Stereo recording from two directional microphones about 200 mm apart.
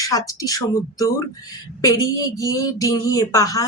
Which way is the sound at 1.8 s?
15° left (ahead or behind).